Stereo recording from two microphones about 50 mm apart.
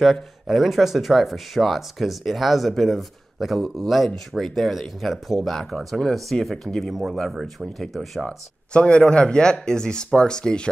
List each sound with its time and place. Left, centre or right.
0.0 s speech: centre
8.3 s speech: centre